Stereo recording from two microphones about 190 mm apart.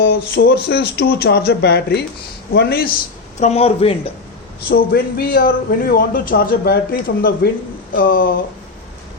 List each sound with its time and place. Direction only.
0.0 s speech: 60° left (ahead or behind)
3.4 s speech: 30° left (ahead or behind)
4.7 s a man's voice: 50° left (ahead or behind)